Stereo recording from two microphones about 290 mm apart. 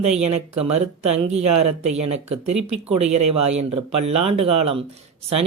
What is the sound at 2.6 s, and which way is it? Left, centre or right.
Speech, right.